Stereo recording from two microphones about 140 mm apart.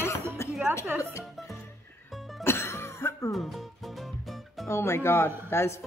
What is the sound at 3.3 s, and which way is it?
Music, centre (ahead or behind).